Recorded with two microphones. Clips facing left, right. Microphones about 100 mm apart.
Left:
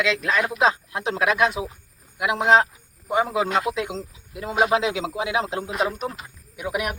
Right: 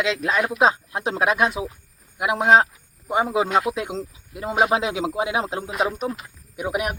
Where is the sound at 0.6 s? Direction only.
30° right (ahead or behind).